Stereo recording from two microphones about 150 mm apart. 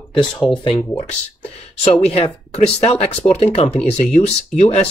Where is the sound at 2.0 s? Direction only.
45° left (ahead or behind).